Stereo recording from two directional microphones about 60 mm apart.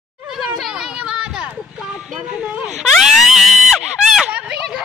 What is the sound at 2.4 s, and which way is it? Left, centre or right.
Baby cry, centre.